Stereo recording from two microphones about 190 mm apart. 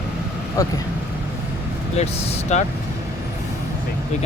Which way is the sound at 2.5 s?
35° left (ahead or behind).